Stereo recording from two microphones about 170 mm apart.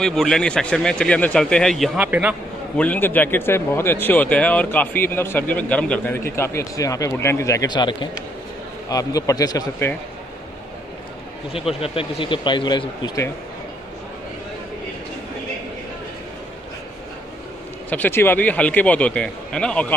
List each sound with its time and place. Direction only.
0.0 s speech: 5° left (ahead or behind)
2.0 s a man's voice: 10° right (ahead or behind)
2.8 s a man's voice: 10° left (ahead or behind)
11.5 s speech: 35° left (ahead or behind)
17.8 s a man's voice: 10° left (ahead or behind)